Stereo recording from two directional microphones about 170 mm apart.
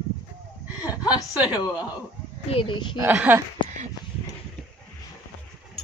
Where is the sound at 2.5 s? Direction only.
30° left (ahead or behind).